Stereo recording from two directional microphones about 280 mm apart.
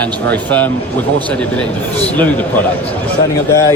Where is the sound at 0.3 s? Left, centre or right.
Centre.